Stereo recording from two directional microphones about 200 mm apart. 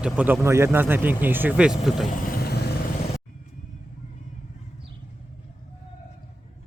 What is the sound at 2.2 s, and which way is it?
Vehicle, 50° left (ahead or behind).